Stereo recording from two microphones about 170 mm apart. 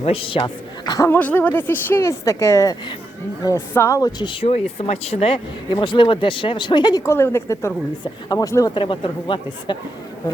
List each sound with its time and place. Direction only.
0.0 s speech: 35° left (ahead or behind)